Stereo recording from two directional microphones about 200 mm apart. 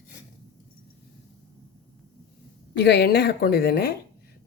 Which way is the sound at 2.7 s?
55° left (ahead or behind).